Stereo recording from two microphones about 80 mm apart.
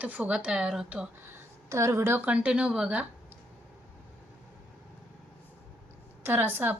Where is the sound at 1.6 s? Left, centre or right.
Right; by 3.0 s centre.